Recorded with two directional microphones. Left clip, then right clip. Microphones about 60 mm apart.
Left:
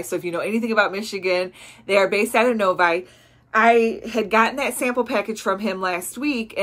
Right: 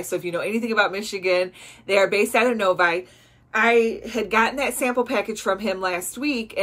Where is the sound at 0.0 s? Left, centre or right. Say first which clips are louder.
Left 1 dB; left.